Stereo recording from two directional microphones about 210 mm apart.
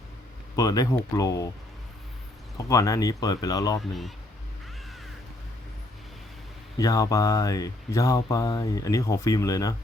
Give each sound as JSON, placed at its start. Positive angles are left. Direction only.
{"t": 0.5, "sound": "speech", "side_deg": 15}
{"t": 2.6, "sound": "speech", "side_deg": 15}
{"t": 6.7, "sound": "speech", "side_deg": 15}